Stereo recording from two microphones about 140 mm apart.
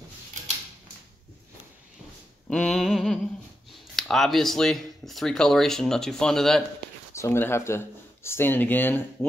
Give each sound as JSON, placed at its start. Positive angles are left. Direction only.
{"t": 2.5, "sound": "speech", "side_deg": 5}
{"t": 7.2, "sound": "speech", "side_deg": 15}